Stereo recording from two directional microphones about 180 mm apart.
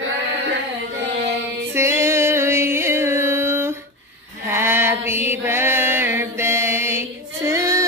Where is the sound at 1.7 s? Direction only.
15° right (ahead or behind).